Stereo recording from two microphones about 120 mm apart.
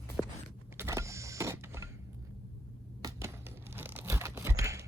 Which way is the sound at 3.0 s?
20° right (ahead or behind).